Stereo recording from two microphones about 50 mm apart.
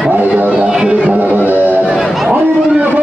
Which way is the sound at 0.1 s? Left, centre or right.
Right.